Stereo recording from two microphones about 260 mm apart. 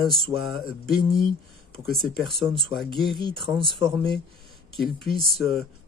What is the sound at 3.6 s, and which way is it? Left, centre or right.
Speech, centre.